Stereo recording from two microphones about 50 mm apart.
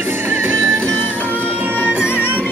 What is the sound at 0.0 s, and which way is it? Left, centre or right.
Music, right.